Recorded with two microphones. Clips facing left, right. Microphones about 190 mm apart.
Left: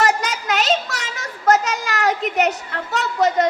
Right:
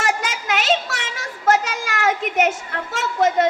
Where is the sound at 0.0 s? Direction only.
40° left (ahead or behind).